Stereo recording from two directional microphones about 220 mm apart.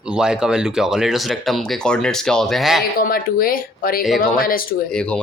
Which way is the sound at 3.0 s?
40° left (ahead or behind).